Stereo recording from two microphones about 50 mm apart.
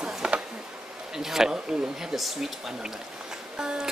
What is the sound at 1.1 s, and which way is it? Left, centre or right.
Speech, centre.